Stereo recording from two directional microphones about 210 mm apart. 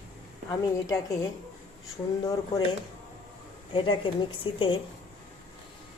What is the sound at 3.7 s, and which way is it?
Speech, 25° left (ahead or behind).